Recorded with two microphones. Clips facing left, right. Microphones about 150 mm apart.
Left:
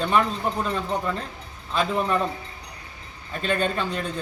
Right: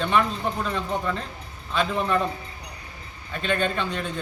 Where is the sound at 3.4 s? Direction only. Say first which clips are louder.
Left 1 dB; 40° left (ahead or behind).